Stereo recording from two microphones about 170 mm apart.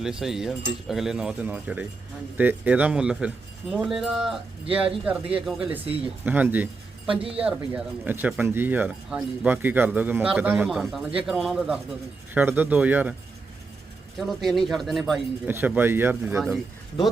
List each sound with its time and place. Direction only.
0.0 s speech: 5° right (ahead or behind)
7.2 s speech: 35° right (ahead or behind)
7.4 s speech: 5° right (ahead or behind)
14.2 s speech: centre (ahead or behind)
15.4 s speech: 10° right (ahead or behind)